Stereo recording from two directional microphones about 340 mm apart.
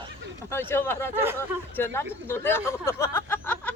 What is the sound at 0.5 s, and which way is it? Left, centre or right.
Speech, centre.